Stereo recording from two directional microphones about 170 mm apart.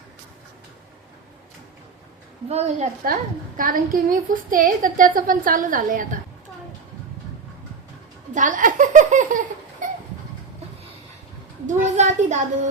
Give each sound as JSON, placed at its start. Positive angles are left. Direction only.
{"t": 2.5, "sound": "a woman's voice", "side_deg": -40}
{"t": 3.0, "sound": "a woman's voice", "side_deg": -60}
{"t": 8.3, "sound": "speech", "side_deg": -50}
{"t": 9.8, "sound": "chicken", "side_deg": -50}
{"t": 11.6, "sound": "speech", "side_deg": -40}